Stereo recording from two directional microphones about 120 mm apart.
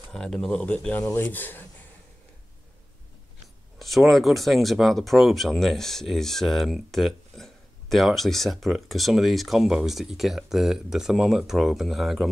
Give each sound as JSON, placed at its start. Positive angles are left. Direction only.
{"t": 0.1, "sound": "speech", "side_deg": 5}
{"t": 3.8, "sound": "speech", "side_deg": 0}